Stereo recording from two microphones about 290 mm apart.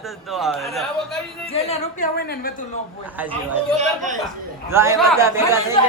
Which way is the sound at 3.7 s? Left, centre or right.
Right.